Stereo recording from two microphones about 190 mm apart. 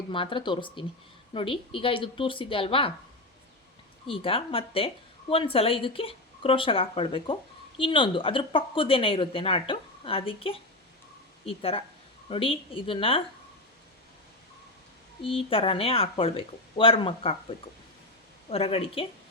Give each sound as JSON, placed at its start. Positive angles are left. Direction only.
{"t": 0.1, "sound": "speech", "side_deg": 25}
{"t": 4.1, "sound": "speech", "side_deg": 30}
{"t": 15.2, "sound": "speech", "side_deg": 30}
{"t": 18.5, "sound": "speech", "side_deg": 30}